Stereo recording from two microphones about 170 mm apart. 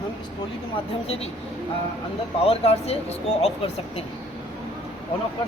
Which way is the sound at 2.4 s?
35° left (ahead or behind).